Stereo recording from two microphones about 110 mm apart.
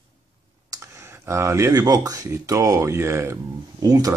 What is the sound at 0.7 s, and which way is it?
Computer keyboard, 30° right (ahead or behind).